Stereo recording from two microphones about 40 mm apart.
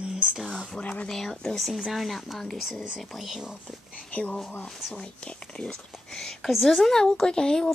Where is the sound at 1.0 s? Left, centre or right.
Centre.